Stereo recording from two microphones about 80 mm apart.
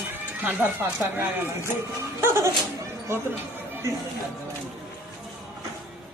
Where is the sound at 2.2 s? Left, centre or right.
Right.